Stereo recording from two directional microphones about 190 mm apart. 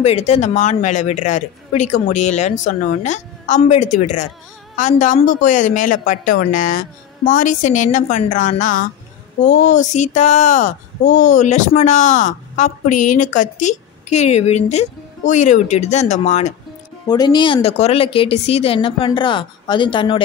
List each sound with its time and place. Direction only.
0.0 s speech: 35° left (ahead or behind)
17.1 s speech: 20° left (ahead or behind)